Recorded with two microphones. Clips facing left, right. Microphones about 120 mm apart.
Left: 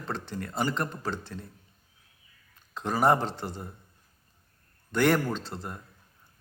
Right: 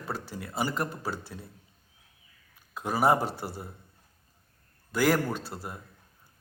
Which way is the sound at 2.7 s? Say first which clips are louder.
Left 1 dB; 10° right (ahead or behind).